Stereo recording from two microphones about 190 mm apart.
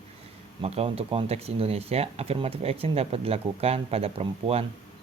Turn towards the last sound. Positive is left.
turn(degrees=-30)  # may be behind; listen again after turning